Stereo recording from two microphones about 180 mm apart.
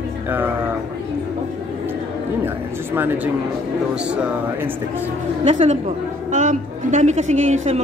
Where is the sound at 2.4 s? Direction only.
10° right (ahead or behind).